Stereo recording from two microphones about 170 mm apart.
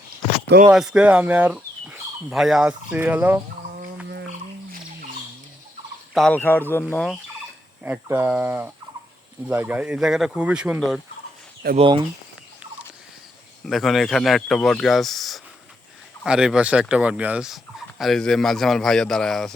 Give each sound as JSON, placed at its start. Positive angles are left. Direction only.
{"t": 0.7, "sound": "speech", "side_deg": -5}
{"t": 6.1, "sound": "speech", "side_deg": 5}
{"t": 7.9, "sound": "speech", "side_deg": -15}
{"t": 9.5, "sound": "turkey", "side_deg": -10}
{"t": 11.8, "sound": "speech", "side_deg": -30}
{"t": 13.7, "sound": "turkey", "side_deg": 0}